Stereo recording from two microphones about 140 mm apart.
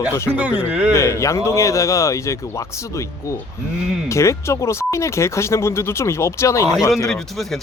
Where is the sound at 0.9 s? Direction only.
20° left (ahead or behind).